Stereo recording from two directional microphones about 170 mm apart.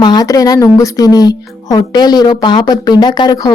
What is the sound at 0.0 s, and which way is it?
Speech, 25° left (ahead or behind).